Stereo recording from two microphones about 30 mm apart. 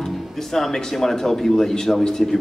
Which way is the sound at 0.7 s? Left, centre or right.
Centre.